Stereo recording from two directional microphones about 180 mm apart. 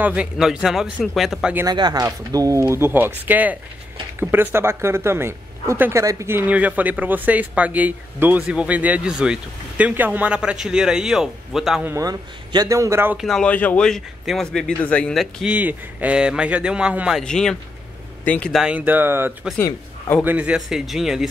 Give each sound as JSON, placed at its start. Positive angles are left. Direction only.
{"t": 0.0, "sound": "speech", "side_deg": -5}
{"t": 1.7, "sound": "a woman's voice", "side_deg": -20}
{"t": 11.9, "sound": "a woman's voice", "side_deg": -20}
{"t": 13.3, "sound": "a woman's voice", "side_deg": 5}
{"t": 19.6, "sound": "a man's voice", "side_deg": 10}
{"t": 20.2, "sound": "speech", "side_deg": -5}